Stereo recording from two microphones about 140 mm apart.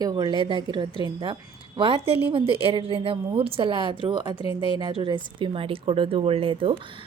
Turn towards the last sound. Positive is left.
turn(degrees=-40)  # may be behind; listen again after turning